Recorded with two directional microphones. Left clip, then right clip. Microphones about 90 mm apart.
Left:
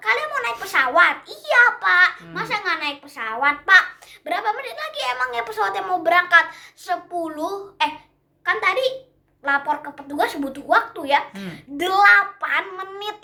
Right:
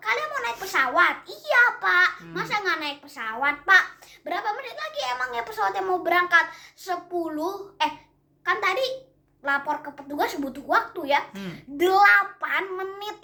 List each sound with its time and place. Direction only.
0.0 s a child's voice: 35° left (ahead or behind)